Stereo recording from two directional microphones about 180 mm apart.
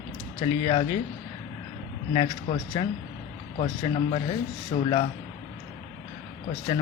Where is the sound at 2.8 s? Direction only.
30° left (ahead or behind).